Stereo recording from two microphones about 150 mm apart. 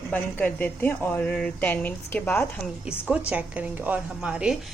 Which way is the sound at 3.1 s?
10° right (ahead or behind).